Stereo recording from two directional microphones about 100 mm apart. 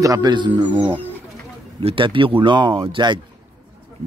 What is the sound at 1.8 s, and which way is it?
Speech, 60° right (ahead or behind).